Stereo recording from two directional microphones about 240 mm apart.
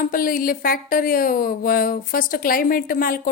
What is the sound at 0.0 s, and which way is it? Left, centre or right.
A woman's voice, left.